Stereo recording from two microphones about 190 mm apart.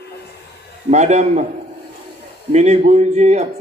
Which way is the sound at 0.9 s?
35° right (ahead or behind).